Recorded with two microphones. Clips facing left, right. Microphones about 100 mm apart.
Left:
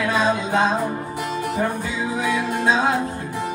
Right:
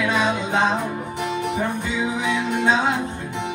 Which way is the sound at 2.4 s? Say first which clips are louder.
Right 2 dB; 20° right (ahead or behind).